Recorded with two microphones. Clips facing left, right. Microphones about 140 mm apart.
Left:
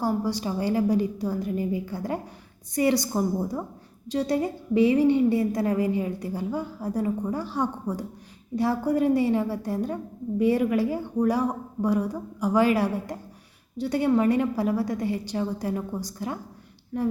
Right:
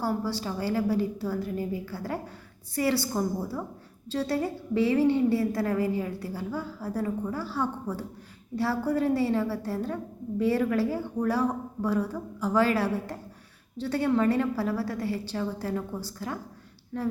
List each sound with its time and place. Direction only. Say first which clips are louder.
0.0 s a woman's voice: left 3 dB; 15° left (ahead or behind)